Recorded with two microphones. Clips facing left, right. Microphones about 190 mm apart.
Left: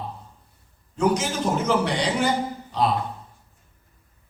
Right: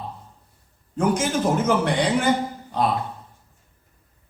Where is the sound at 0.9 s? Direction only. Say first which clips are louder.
Right 1 dB; 50° right (ahead or behind).